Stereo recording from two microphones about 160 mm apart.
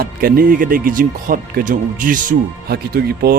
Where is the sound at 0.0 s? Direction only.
65° right (ahead or behind).